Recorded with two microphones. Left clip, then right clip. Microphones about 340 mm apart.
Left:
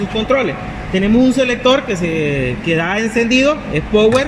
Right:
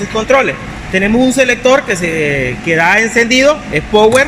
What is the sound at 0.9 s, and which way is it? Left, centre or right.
A man's voice, right.